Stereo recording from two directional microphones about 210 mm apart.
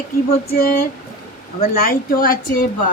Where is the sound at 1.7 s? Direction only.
45° left (ahead or behind).